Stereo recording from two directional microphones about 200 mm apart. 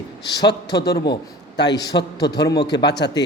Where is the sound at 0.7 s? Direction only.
55° left (ahead or behind).